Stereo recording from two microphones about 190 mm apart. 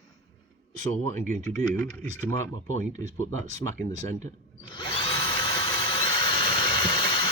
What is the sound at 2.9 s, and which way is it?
Speech, 35° right (ahead or behind).